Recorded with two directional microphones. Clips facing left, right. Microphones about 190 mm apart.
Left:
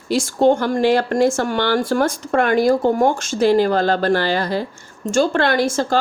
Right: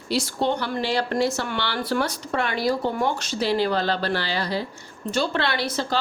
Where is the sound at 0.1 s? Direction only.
45° left (ahead or behind).